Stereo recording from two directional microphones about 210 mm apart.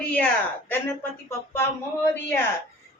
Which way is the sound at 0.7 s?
10° left (ahead or behind).